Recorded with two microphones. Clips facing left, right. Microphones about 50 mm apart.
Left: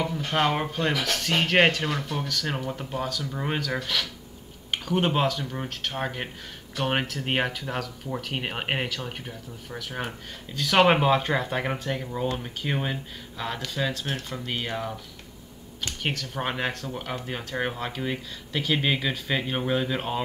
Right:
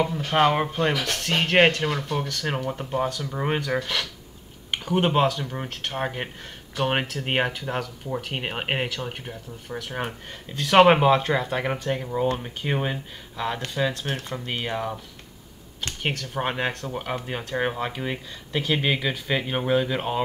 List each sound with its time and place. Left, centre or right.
0.2 s speech: centre
14.0 s speech: centre
14.4 s speech: centre
16.0 s speech: centre
16.9 s speech: centre